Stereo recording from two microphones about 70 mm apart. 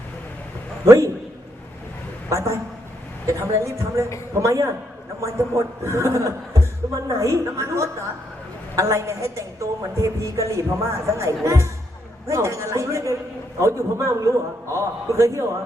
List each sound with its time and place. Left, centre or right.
0.9 s a woman's voice: right
2.3 s a woman's voice: right